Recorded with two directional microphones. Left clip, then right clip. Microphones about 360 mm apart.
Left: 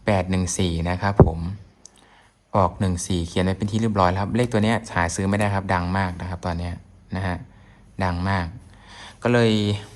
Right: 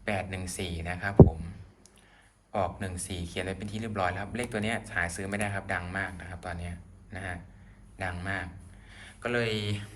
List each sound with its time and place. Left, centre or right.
0.0 s speech: centre
2.5 s speech: centre